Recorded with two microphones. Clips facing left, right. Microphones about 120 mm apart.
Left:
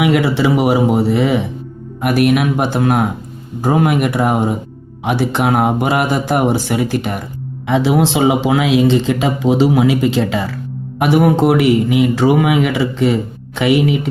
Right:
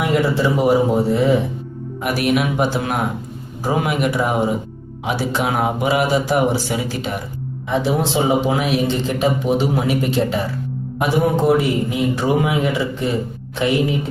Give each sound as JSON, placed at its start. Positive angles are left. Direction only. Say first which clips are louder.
{"t": 0.0, "sound": "speech", "louder": "left 4 dB", "side_deg": 90}
{"t": 2.0, "sound": "speech", "louder": "left 5 dB", "side_deg": 60}
{"t": 7.7, "sound": "speech", "louder": "left 5 dB", "side_deg": 90}
{"t": 11.0, "sound": "speech", "louder": "left 5 dB", "side_deg": 70}